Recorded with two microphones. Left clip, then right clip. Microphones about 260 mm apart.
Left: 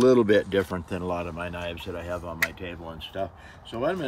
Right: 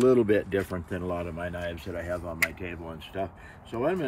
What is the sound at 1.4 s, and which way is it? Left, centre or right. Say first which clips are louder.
Speech: left 1 dB; centre.